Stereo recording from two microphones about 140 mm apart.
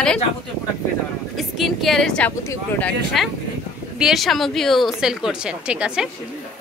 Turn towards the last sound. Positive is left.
turn(degrees=-5)  # may be behind; listen again after turning